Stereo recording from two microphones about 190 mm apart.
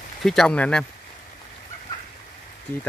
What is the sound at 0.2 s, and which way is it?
Speech, centre (ahead or behind).